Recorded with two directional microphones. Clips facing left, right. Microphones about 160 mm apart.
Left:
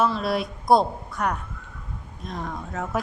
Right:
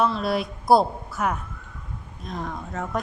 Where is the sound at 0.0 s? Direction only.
Centre (ahead or behind).